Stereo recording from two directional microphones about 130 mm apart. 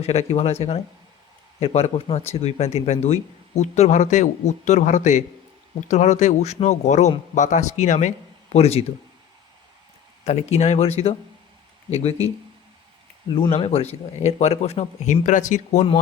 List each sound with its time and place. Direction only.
0.0 s speech: 55° left (ahead or behind)
1.5 s speech: 50° left (ahead or behind); by 8.1 s 65° left (ahead or behind)
8.5 s speech: 50° left (ahead or behind)
10.2 s speech: 55° left (ahead or behind)
13.6 s speech: 50° left (ahead or behind)
14.2 s speech: 60° left (ahead or behind)